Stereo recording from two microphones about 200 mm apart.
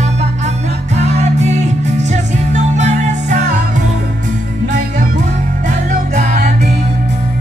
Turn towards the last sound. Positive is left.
turn(degrees=-35)  # may be behind; listen again after turning